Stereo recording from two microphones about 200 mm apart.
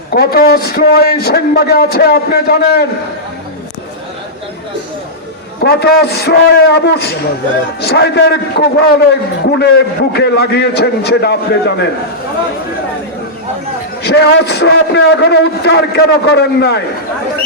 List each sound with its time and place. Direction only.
0.1 s a man's voice: 50° left (ahead or behind)
5.6 s a man's voice: 55° left (ahead or behind)
14.0 s a man's voice: 55° left (ahead or behind)